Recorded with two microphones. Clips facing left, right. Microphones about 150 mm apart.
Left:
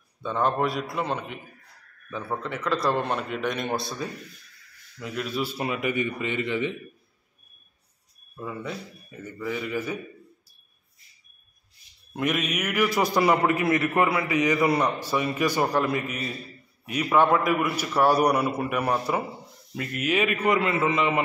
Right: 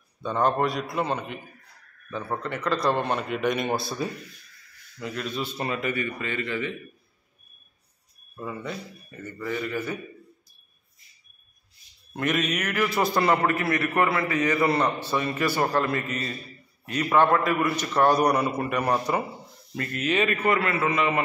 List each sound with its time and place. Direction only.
0.2 s a man's voice: centre (ahead or behind); by 6.7 s 20° left (ahead or behind)
8.4 s a man's voice: centre (ahead or behind)
12.2 s a man's voice: 10° left (ahead or behind)